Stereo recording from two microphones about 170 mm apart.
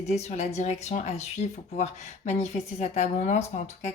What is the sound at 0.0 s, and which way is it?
Speech, 40° left (ahead or behind).